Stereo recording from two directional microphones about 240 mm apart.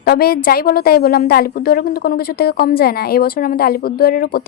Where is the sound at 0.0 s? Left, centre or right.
Left.